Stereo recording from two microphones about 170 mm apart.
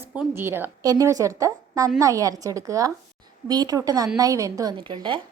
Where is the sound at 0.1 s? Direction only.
10° right (ahead or behind).